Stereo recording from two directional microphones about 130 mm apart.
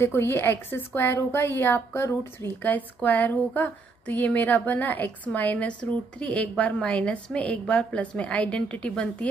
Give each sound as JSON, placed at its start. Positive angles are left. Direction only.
{"t": 0.0, "sound": "a woman's voice", "side_deg": 20}